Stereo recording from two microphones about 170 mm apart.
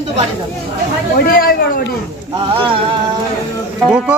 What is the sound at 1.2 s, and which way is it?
Speech, 60° left (ahead or behind).